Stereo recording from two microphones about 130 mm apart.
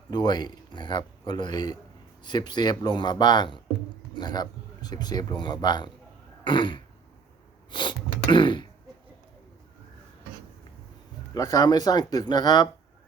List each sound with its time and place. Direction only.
0.1 s speech: 35° left (ahead or behind)
6.4 s throat clearing: 40° left (ahead or behind)
11.3 s speech: 30° left (ahead or behind)